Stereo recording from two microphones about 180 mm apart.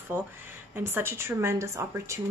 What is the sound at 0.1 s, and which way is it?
Speech, 10° right (ahead or behind).